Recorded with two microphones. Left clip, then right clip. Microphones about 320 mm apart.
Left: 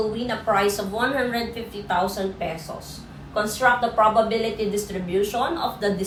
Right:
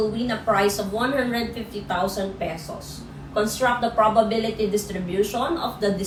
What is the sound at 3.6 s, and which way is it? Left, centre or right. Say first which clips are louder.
A woman's voice: left 2 dB; centre.